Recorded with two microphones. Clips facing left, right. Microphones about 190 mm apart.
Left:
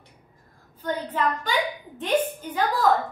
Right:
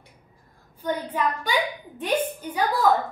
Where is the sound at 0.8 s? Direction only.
10° right (ahead or behind).